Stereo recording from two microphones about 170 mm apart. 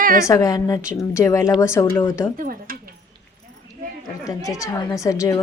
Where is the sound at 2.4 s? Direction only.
55° right (ahead or behind).